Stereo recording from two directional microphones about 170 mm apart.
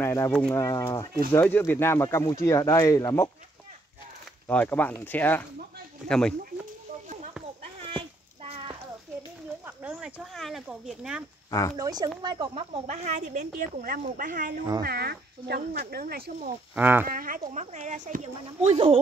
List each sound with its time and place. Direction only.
0.0 s speech: 15° left (ahead or behind)
0.3 s speech: 5° left (ahead or behind)
0.6 s speech: 20° left (ahead or behind)
4.5 s speech: 10° left (ahead or behind)
7.8 s a sound: 35° right (ahead or behind)
9.7 s speech: 5° right (ahead or behind)
11.7 s speech: 25° right (ahead or behind)
12.8 s a woman's voice: 40° right (ahead or behind)
13.7 s speech: 55° right (ahead or behind)
14.8 s speech: 65° right (ahead or behind)
16.7 s speech: 10° right (ahead or behind)
17.1 s speech: 55° right (ahead or behind); by 18.9 s 35° right (ahead or behind)